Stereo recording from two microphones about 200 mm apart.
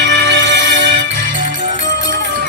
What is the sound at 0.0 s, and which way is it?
Music, 65° right (ahead or behind).